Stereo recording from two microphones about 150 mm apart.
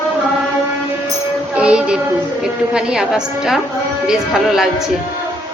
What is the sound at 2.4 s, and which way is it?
A woman's voice, 5° right (ahead or behind).